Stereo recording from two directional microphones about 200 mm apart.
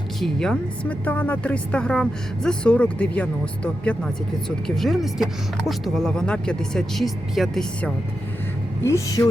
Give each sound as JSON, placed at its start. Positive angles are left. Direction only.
{"t": 0.2, "sound": "speech", "side_deg": 5}
{"t": 8.8, "sound": "speech", "side_deg": 15}